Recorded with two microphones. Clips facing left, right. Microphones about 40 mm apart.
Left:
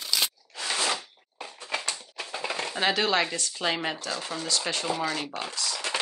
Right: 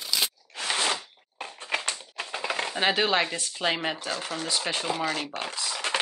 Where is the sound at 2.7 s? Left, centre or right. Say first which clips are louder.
Even; centre.